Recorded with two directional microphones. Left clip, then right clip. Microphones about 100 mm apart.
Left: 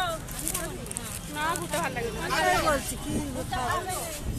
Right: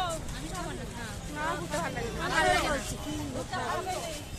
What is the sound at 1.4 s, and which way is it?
Speech, 5° left (ahead or behind).